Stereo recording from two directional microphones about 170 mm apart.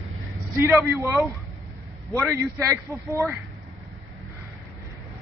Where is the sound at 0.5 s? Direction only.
15° right (ahead or behind).